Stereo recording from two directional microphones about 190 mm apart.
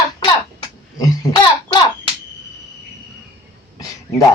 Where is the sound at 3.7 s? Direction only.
15° left (ahead or behind).